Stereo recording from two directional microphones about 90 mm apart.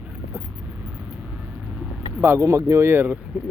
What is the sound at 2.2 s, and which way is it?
Speech, 30° right (ahead or behind).